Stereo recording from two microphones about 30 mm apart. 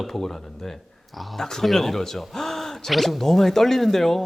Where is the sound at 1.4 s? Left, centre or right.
Centre.